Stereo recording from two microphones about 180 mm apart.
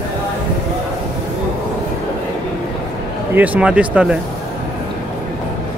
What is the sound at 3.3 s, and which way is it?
Speech, 10° right (ahead or behind).